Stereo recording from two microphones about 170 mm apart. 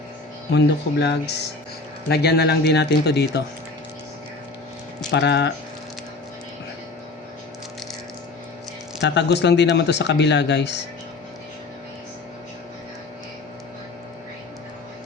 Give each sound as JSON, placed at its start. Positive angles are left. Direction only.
{"t": 0.5, "sound": "speech", "side_deg": 85}
{"t": 5.1, "sound": "speech", "side_deg": 85}
{"t": 9.0, "sound": "speech", "side_deg": 90}